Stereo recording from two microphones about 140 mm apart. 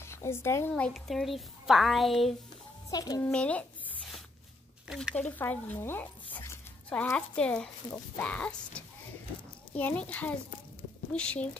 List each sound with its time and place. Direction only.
0.0 s speech: 20° left (ahead or behind); by 2.3 s centre (ahead or behind)
2.9 s a child's voice: 25° left (ahead or behind)
3.2 s a child's voice: 10° left (ahead or behind)
4.8 s speech: 5° right (ahead or behind)
5.1 s speech: 10° left (ahead or behind)